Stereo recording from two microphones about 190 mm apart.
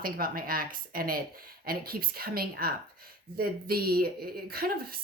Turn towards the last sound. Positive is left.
turn(degrees=-50)  # may be behind; listen again after turning